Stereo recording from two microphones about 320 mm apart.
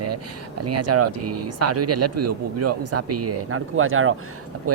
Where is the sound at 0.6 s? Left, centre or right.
Right.